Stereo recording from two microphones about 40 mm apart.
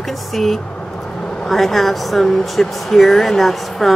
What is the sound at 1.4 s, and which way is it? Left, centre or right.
Speech, centre.